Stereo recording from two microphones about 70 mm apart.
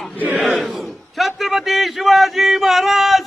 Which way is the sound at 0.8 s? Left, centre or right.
Centre.